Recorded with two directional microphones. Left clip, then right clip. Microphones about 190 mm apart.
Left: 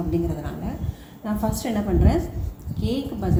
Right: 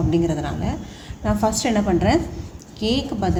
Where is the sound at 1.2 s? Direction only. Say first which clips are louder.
Right 7 dB; 55° right (ahead or behind).